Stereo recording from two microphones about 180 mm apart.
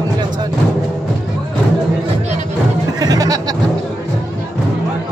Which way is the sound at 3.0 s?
20° right (ahead or behind).